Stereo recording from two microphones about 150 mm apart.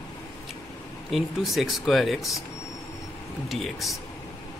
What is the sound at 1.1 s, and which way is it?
Speech, centre (ahead or behind).